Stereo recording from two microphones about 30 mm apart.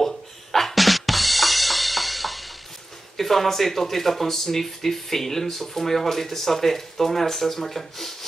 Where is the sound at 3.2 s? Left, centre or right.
Centre.